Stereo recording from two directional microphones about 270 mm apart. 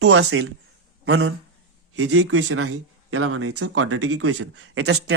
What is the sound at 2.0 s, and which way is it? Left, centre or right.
Speech, right.